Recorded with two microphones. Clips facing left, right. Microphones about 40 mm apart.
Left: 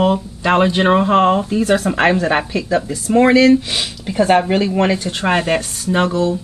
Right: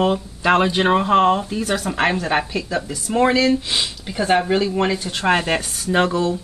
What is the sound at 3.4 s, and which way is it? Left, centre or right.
Speech, left.